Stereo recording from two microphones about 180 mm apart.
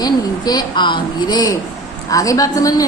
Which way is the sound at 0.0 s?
20° left (ahead or behind).